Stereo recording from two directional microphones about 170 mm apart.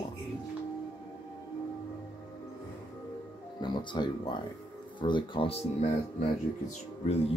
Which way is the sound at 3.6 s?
25° left (ahead or behind).